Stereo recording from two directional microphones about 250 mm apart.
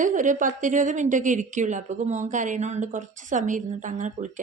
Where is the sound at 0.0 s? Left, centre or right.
Right.